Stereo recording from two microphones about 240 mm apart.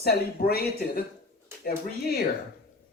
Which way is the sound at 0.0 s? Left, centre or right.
Left.